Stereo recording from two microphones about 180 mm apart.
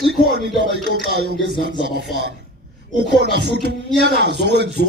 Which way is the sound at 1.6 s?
65° right (ahead or behind).